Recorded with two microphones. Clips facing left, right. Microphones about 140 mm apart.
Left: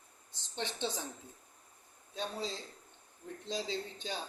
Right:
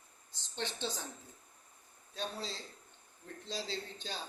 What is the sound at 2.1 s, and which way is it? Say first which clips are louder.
Speech: left 2 dB; 15° left (ahead or behind).